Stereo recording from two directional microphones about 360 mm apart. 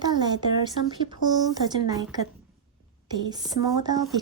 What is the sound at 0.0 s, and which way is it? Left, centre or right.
A woman's voice, centre.